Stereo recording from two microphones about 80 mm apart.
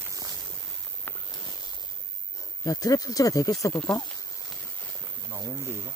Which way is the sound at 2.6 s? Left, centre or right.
Left.